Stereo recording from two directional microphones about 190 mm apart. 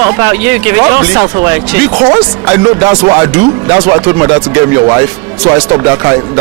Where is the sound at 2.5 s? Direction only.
10° right (ahead or behind).